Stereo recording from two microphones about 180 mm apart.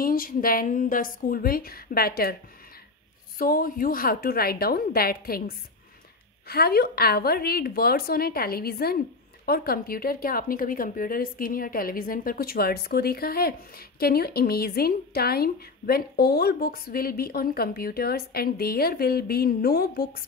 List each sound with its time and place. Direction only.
0.0 s a woman's voice: 50° left (ahead or behind)
3.3 s a woman's voice: 50° left (ahead or behind)
6.4 s a woman's voice: 60° left (ahead or behind)